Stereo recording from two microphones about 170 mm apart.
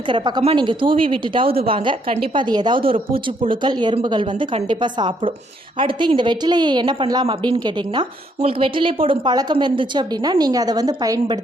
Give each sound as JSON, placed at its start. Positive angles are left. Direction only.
{"t": 0.0, "sound": "a woman's voice", "side_deg": -30}